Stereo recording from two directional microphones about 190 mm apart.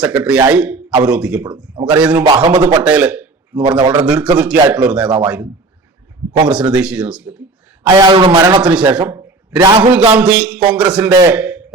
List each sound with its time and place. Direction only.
0.0 s a man's voice: 5° right (ahead or behind)
2.2 s a man's voice: 25° right (ahead or behind)
2.8 s a man's voice: 5° right (ahead or behind)
3.6 s a man's voice: 25° right (ahead or behind)
4.0 s a man's voice: 5° right (ahead or behind)
6.5 s a man's voice: 5° right (ahead or behind)
7.9 s a man's voice: 25° right (ahead or behind)
8.6 s a man's voice: 5° right (ahead or behind)
9.6 s a man's voice: 20° right (ahead or behind)
9.9 s a man's voice: 10° right (ahead or behind)